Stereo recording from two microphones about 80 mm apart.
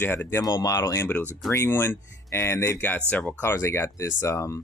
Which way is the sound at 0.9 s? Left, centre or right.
Left.